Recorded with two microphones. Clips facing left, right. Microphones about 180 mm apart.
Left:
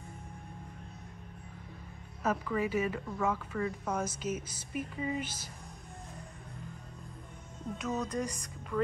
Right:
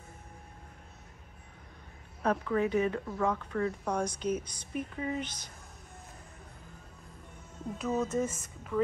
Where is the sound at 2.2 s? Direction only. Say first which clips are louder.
Right 3 dB; 5° left (ahead or behind).